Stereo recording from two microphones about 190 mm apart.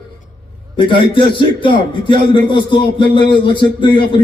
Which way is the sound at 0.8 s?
25° left (ahead or behind).